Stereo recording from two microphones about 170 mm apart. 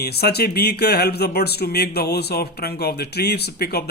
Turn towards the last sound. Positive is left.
turn(degrees=70)  # may be behind; listen again after turning